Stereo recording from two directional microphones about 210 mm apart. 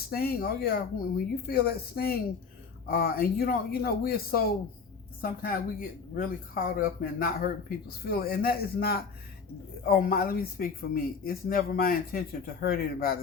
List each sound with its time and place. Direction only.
0.1 s speech: 45° left (ahead or behind)